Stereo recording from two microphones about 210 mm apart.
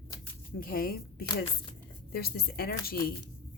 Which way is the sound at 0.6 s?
45° left (ahead or behind).